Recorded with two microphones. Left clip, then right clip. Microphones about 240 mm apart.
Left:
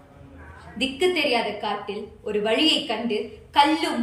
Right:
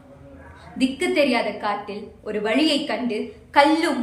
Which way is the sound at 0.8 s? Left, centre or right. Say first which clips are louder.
Right 2 dB; centre.